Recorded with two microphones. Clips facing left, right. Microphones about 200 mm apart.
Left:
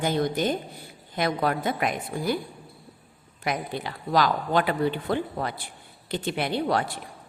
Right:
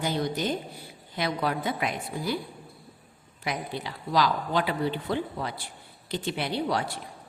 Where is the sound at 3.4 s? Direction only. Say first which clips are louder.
Left 3 dB; 55° left (ahead or behind).